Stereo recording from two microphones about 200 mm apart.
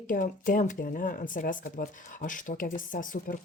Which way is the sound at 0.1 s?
40° left (ahead or behind).